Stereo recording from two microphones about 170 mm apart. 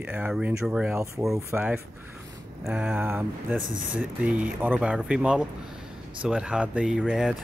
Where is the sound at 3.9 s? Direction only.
5° right (ahead or behind).